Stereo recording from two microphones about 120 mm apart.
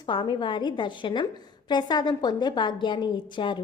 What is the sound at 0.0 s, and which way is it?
A woman's voice, 40° left (ahead or behind).